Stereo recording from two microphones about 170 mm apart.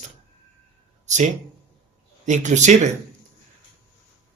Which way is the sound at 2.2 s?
45° right (ahead or behind).